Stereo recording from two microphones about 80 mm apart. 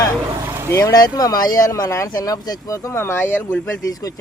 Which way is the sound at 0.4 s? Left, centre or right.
Right.